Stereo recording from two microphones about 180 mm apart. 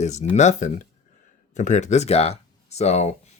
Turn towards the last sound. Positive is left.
turn(degrees=35)  # may be behind; listen again after turning